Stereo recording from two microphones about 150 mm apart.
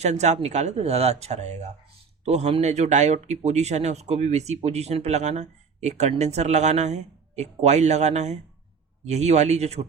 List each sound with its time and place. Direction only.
0.0 s speech: 50° right (ahead or behind)